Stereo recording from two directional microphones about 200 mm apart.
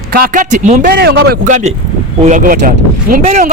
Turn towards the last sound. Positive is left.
turn(degrees=-35)  # may be behind; listen again after turning